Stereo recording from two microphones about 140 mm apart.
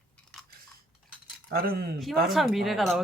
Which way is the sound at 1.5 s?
90° right.